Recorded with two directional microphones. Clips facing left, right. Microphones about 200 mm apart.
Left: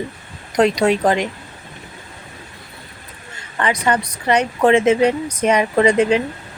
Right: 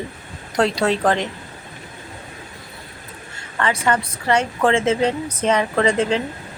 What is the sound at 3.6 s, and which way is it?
Speech, 15° left (ahead or behind).